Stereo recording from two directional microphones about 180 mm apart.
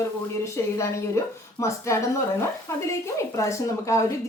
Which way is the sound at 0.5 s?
15° left (ahead or behind).